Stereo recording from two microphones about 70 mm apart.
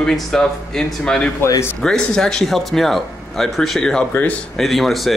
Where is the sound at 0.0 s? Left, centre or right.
Centre.